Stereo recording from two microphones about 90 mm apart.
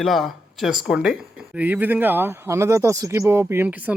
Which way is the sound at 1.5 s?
20° right (ahead or behind).